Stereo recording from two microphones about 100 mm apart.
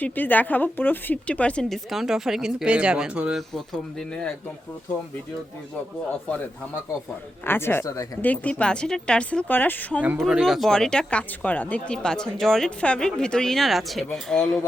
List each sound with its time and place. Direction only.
0.0 s speech: 15° left (ahead or behind)
1.7 s speech: 5° right (ahead or behind)
3.3 s speech: 5° left (ahead or behind)
7.4 s speech: 20° left (ahead or behind)
7.9 s speech: 35° left (ahead or behind)
8.2 s speech: 15° left (ahead or behind)
10.0 s speech: 15° right (ahead or behind)
10.2 s speech: 5° right (ahead or behind)